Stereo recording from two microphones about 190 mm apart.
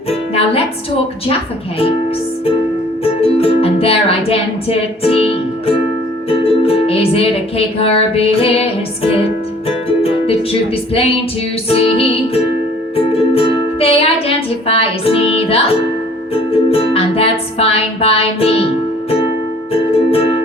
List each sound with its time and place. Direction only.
0.1 s music: 30° left (ahead or behind)
3.0 s music: 30° left (ahead or behind)
19.7 s music: 30° left (ahead or behind)